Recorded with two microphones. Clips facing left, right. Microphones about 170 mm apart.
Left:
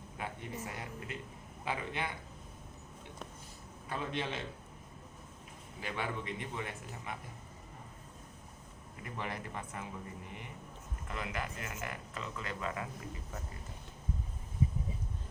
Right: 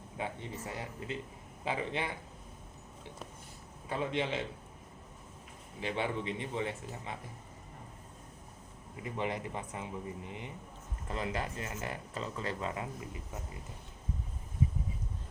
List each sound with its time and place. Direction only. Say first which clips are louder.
0.6 s speech: right 2 dB; 30° right (ahead or behind)
3.8 s speech: right 4 dB; 20° right (ahead or behind)
5.8 s speech: right 4 dB; 25° right (ahead or behind)
9.0 s speech: right 5 dB; 20° right (ahead or behind)